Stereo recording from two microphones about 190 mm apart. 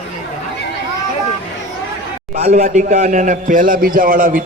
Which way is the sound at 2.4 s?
50° right (ahead or behind).